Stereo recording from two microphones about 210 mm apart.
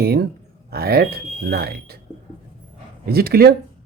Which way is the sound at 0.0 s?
50° right (ahead or behind).